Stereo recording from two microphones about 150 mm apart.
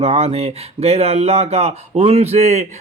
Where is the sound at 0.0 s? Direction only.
40° right (ahead or behind).